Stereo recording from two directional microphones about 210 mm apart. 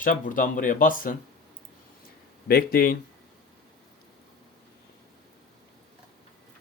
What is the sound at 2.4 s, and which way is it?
Speech, 45° left (ahead or behind).